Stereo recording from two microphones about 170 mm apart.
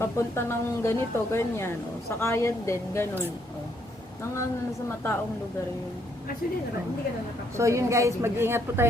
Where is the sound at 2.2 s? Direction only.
15° left (ahead or behind).